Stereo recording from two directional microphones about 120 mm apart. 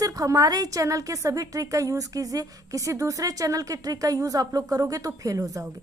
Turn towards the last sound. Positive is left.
turn(degrees=-25)  # may be behind; listen again after turning